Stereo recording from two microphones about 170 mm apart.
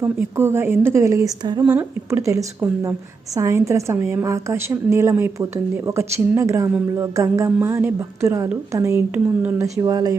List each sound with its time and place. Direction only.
0.0 s a woman's voice: 15° right (ahead or behind)